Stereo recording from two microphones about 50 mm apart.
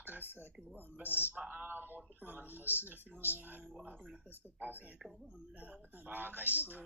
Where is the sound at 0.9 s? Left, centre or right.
Right.